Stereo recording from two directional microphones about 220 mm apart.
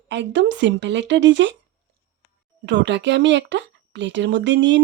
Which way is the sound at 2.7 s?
55° right (ahead or behind).